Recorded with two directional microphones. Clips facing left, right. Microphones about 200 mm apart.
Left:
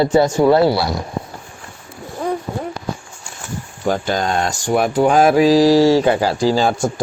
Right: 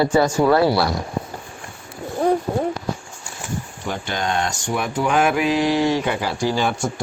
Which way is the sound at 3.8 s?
40° left (ahead or behind).